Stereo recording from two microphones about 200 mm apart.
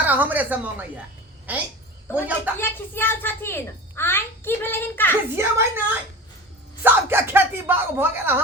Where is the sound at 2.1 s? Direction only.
10° right (ahead or behind).